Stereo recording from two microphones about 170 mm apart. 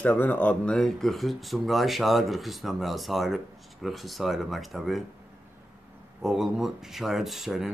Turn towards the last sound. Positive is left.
turn(degrees=0)  # may be behind; listen again after turning